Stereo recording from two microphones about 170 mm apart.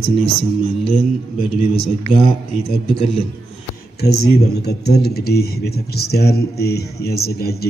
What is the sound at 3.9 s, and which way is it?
Speech, 70° left (ahead or behind).